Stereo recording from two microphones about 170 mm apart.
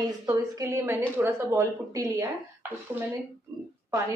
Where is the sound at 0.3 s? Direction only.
15° right (ahead or behind).